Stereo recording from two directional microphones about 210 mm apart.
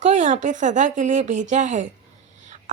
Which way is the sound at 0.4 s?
35° right (ahead or behind).